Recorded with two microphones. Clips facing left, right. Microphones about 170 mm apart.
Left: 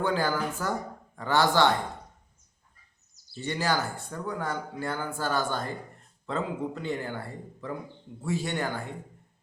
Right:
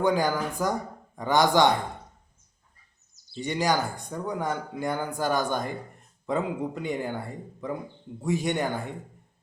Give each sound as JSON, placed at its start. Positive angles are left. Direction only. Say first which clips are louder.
{"t": 0.0, "sound": "speech", "louder": "right 3 dB", "side_deg": -15}
{"t": 3.3, "sound": "speech", "louder": "right 3 dB", "side_deg": -15}